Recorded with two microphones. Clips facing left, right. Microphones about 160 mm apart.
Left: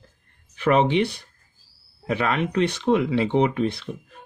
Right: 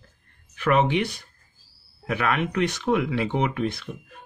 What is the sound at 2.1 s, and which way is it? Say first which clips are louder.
Speech: left 1 dB; 30° left (ahead or behind).